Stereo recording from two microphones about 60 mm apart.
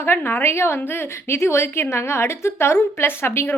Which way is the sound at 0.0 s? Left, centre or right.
Left.